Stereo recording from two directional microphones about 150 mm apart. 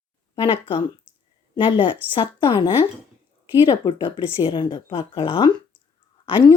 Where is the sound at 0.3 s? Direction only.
35° left (ahead or behind).